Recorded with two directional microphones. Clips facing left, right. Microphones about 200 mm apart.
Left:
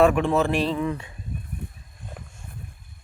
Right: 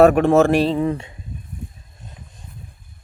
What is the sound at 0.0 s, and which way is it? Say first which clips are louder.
Speech: right 6 dB; 45° right (ahead or behind).